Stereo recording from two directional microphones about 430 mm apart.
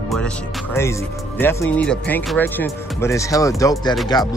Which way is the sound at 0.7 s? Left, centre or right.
Centre.